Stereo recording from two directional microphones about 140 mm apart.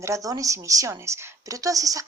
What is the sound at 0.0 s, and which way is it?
A woman's voice, 25° right (ahead or behind).